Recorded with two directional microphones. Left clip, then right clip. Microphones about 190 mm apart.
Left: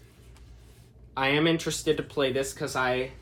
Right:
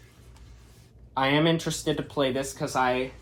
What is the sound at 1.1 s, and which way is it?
Speech, 10° right (ahead or behind).